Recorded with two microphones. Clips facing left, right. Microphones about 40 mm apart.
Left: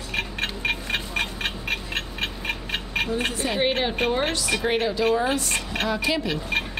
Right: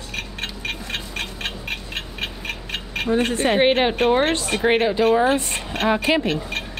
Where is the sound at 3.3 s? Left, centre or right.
Right.